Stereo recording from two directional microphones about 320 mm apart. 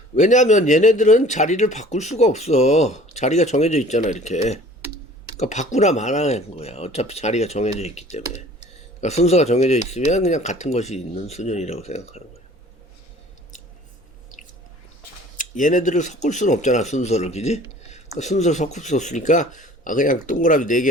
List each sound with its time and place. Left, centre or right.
0.2 s speech: left
15.4 s speech: left